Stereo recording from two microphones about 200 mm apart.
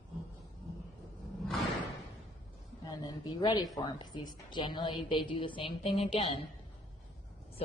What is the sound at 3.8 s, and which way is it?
A woman's voice, 20° left (ahead or behind).